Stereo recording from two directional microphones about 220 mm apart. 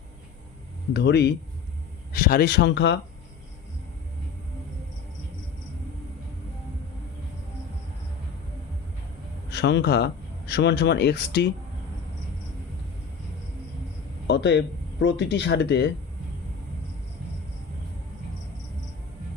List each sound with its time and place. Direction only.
0.9 s speech: 50° left (ahead or behind)
9.5 s speech: 50° left (ahead or behind)
14.3 s speech: 50° left (ahead or behind)